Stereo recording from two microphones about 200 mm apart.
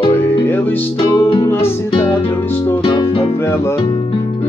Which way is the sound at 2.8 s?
20° left (ahead or behind).